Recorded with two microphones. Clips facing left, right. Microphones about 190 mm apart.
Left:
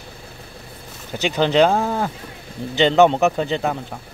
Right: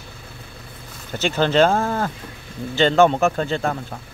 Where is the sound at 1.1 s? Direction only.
15° left (ahead or behind).